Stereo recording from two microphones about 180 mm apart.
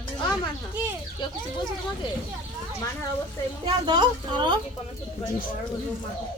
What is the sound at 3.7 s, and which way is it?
Speech, 25° right (ahead or behind).